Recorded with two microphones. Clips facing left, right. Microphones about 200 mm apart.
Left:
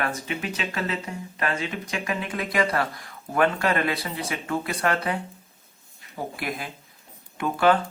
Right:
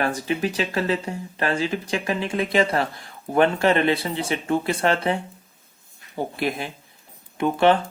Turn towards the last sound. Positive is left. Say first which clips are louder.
# right 3 dB
turn(degrees=-25)  # may be behind; listen again after turning